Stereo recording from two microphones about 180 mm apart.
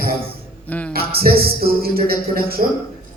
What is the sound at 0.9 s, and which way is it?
A man's voice, 60° right (ahead or behind).